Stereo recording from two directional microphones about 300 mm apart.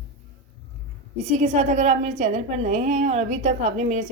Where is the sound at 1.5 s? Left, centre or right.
Right.